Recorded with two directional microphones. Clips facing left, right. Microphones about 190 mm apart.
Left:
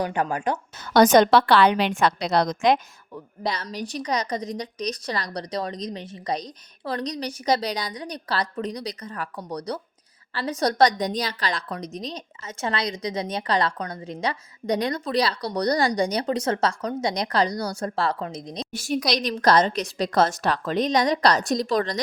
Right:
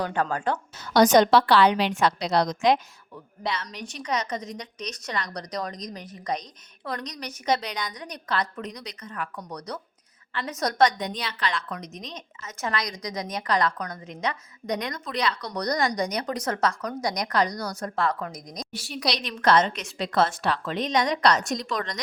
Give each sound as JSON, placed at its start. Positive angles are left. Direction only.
{"t": 0.0, "sound": "a woman's voice", "side_deg": 15}
{"t": 0.9, "sound": "a woman's voice", "side_deg": 55}
{"t": 3.4, "sound": "a woman's voice", "side_deg": 40}
{"t": 18.7, "sound": "a woman's voice", "side_deg": 45}